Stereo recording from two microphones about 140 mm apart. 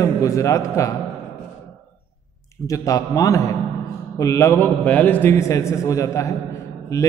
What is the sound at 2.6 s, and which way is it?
A man's voice, 25° left (ahead or behind).